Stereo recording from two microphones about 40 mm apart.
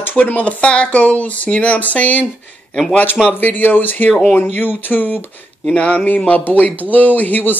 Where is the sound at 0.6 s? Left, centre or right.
Left.